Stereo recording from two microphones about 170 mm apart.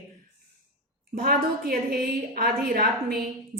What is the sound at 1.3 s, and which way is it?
A woman's voice, 60° right (ahead or behind).